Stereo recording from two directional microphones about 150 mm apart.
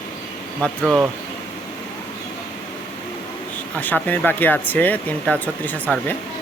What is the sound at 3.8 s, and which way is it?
Speech, 10° left (ahead or behind).